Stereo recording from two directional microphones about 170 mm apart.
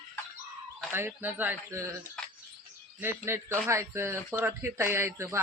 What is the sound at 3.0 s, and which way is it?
Speech, 15° right (ahead or behind).